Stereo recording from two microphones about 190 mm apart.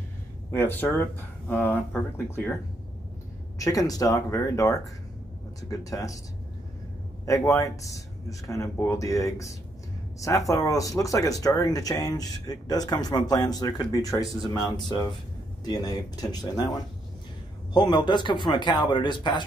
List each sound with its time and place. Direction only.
0.5 s speech: 10° left (ahead or behind)
3.5 s speech: 15° left (ahead or behind)
7.2 s speech: 15° left (ahead or behind)
10.2 s speech: 15° left (ahead or behind)